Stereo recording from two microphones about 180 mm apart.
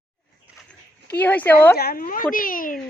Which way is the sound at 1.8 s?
55° left (ahead or behind).